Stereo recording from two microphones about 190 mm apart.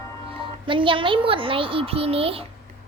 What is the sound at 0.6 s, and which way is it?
A child's voice, 25° right (ahead or behind).